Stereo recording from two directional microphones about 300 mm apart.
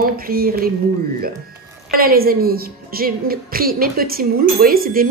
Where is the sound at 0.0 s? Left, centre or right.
Right.